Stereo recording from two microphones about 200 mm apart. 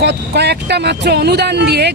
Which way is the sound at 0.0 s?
55° right (ahead or behind).